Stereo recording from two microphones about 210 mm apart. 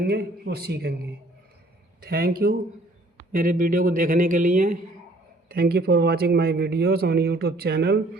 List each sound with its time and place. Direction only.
0.0 s speech: 50° right (ahead or behind)
2.0 s speech: 45° right (ahead or behind)